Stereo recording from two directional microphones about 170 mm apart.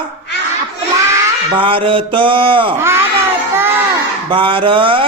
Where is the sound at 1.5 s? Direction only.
30° right (ahead or behind).